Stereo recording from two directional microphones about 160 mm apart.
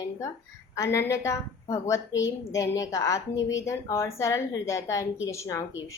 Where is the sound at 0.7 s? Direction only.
20° left (ahead or behind).